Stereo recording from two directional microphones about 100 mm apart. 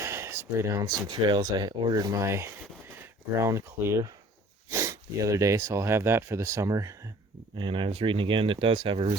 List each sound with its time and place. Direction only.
0.0 s a sound: 25° right (ahead or behind)
0.9 s speech: 40° right (ahead or behind)
7.5 s speech: 55° right (ahead or behind)